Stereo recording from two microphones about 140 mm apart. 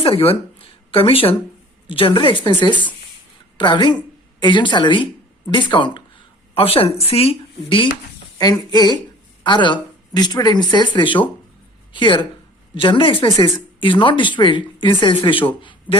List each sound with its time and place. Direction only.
0.0 s speech: 40° left (ahead or behind)
8.4 s a woman's voice: 30° left (ahead or behind)